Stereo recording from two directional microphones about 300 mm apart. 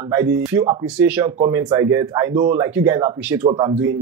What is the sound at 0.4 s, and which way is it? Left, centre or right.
Speech, centre.